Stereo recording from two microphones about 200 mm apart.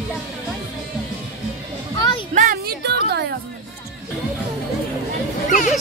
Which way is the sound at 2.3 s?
40° right (ahead or behind).